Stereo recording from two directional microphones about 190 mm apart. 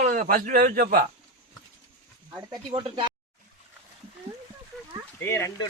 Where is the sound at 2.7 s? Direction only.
25° right (ahead or behind).